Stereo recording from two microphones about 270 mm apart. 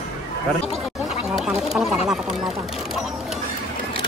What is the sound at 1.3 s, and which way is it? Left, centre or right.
Speech, centre.